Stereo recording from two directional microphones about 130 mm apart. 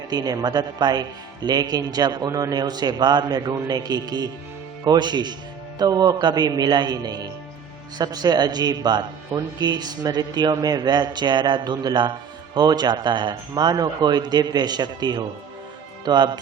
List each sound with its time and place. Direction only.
0.1 s a man's voice: 30° right (ahead or behind)